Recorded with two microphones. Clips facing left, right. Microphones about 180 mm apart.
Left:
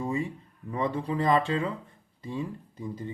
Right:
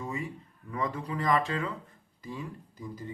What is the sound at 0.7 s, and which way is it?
Speech, 30° left (ahead or behind).